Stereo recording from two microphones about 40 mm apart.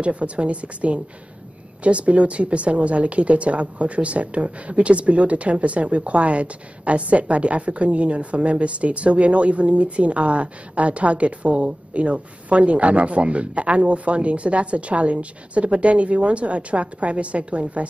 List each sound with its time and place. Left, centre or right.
0.0 s speech: right